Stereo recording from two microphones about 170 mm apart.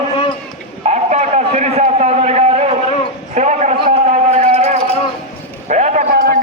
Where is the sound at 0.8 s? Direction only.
45° right (ahead or behind).